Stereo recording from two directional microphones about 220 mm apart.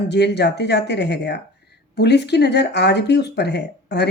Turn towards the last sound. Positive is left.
turn(degrees=50)  # may be behind; listen again after turning